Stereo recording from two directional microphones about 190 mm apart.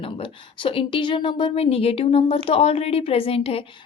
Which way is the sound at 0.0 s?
25° left (ahead or behind).